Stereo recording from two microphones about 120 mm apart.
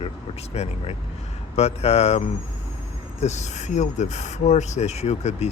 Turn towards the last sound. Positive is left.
turn(degrees=65)  # may be behind; listen again after turning